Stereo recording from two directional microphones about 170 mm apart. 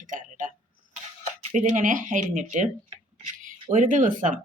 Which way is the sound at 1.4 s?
45° right (ahead or behind).